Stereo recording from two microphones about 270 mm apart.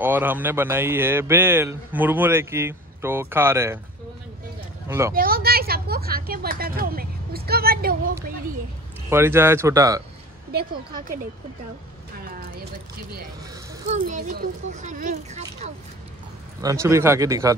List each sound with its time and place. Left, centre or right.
0.0 s a man's voice: centre
4.8 s speech: centre
5.1 s a woman's voice: right
9.1 s a man's voice: centre
10.5 s speech: right
12.2 s a sound: right
13.8 s speech: right
16.6 s a man's voice: centre